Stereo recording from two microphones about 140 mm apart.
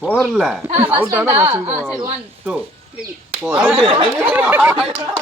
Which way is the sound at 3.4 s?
10° right (ahead or behind).